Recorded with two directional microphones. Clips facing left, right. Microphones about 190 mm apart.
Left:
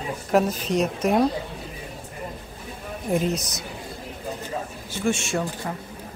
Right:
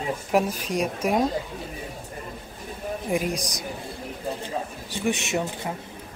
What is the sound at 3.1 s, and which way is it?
Speech, 10° right (ahead or behind).